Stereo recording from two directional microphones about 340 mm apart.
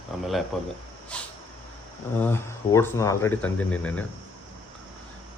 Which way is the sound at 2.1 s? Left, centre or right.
Centre.